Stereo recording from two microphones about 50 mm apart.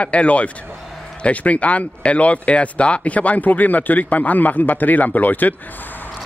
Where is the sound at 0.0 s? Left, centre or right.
Left.